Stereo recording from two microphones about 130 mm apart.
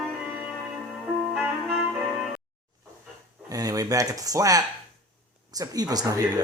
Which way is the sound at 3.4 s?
25° right (ahead or behind).